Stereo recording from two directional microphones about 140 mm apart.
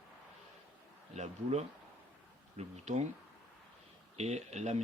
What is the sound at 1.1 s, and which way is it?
Speech, 50° right (ahead or behind).